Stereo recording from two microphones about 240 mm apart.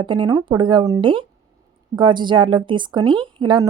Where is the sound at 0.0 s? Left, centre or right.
Centre.